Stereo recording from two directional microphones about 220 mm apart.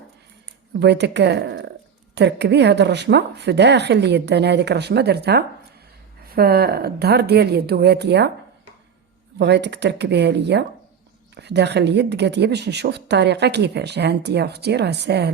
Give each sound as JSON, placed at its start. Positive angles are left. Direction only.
{"t": 0.8, "sound": "speech", "side_deg": -50}
{"t": 9.4, "sound": "speech", "side_deg": -50}